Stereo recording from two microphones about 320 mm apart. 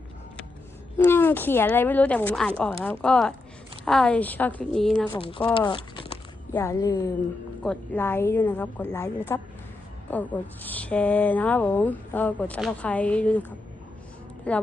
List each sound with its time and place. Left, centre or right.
0.9 s speech: centre
5.1 s a woman's voice: centre
5.5 s a sound: centre
6.5 s a woman's voice: centre
14.5 s speech: centre